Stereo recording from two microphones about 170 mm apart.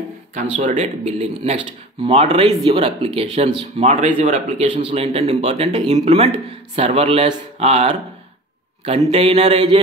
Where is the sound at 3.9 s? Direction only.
45° right (ahead or behind).